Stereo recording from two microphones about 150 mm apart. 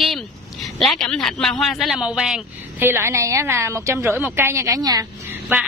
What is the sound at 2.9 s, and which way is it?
A woman's voice, 20° right (ahead or behind).